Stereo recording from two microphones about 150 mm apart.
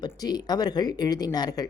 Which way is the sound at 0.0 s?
25° left (ahead or behind).